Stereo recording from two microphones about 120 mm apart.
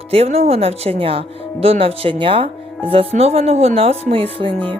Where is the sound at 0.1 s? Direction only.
55° right (ahead or behind).